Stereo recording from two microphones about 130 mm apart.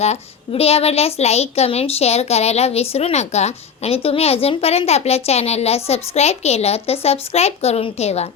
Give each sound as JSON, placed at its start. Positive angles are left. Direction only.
{"t": 0.0, "sound": "a woman's voice", "side_deg": 55}